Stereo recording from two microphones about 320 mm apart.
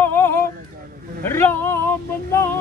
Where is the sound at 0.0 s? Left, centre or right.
Centre.